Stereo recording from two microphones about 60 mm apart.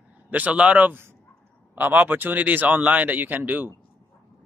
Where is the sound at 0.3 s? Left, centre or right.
Right.